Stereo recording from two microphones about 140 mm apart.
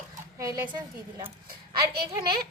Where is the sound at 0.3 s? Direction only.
25° right (ahead or behind).